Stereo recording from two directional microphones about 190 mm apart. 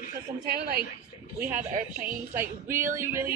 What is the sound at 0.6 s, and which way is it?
Speech, 55° right (ahead or behind).